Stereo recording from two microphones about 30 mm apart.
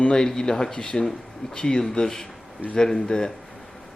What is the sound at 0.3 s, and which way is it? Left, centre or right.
Speech, centre.